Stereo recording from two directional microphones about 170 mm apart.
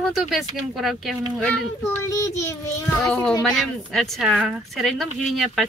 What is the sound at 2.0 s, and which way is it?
Child singing, 15° left (ahead or behind).